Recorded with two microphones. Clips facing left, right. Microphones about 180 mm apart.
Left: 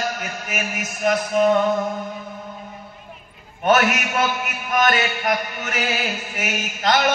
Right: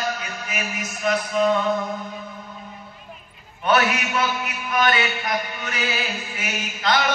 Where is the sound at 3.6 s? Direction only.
45° left (ahead or behind).